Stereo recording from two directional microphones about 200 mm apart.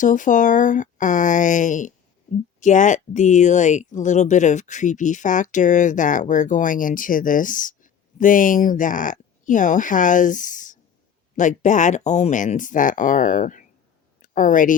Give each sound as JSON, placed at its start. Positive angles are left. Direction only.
{"t": 0.0, "sound": "speech", "side_deg": 40}